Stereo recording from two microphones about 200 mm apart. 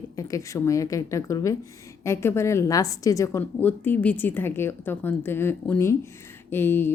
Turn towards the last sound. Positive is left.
turn(degrees=10)  # may be behind; listen again after turning